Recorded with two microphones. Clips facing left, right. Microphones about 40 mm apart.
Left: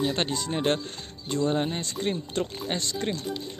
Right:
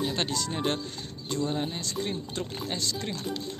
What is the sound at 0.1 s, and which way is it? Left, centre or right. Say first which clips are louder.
Speech: left 2 dB; left.